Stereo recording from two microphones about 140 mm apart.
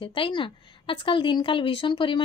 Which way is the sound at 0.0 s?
40° left (ahead or behind).